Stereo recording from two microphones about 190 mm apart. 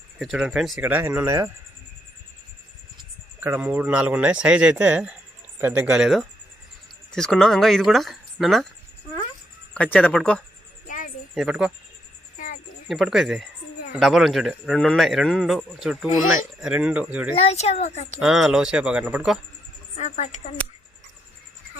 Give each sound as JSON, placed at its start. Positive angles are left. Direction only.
{"t": 0.2, "sound": "speech", "side_deg": 0}
{"t": 3.4, "sound": "a man's voice", "side_deg": -10}
{"t": 9.7, "sound": "speech", "side_deg": 5}
{"t": 10.8, "sound": "a sound", "side_deg": 45}
{"t": 11.3, "sound": "a man's voice", "side_deg": -5}
{"t": 12.9, "sound": "a man's voice", "side_deg": 0}
{"t": 17.3, "sound": "speech", "side_deg": 35}
{"t": 18.2, "sound": "a man's voice", "side_deg": 0}
{"t": 20.0, "sound": "speech", "side_deg": 40}